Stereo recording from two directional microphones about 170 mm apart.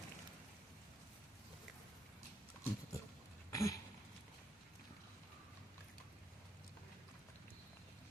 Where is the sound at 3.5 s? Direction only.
20° left (ahead or behind).